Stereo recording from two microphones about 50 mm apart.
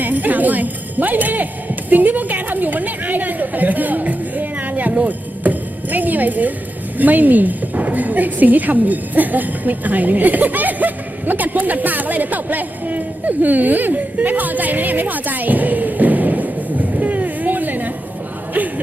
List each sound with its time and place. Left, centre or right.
0.0 s speech: right
4.9 s a sound: right
7.0 s speech: right